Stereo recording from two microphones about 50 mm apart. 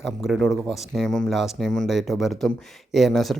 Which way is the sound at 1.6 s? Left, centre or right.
Centre.